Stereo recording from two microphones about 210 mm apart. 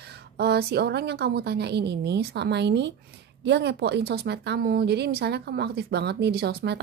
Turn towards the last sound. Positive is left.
turn(degrees=-55)  # may be behind; listen again after turning